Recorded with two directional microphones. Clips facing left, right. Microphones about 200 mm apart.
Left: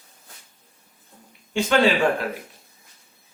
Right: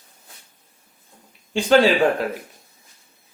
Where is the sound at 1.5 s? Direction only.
35° right (ahead or behind).